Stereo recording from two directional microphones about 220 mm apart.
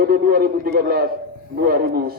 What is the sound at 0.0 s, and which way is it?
A man's voice, 45° right (ahead or behind).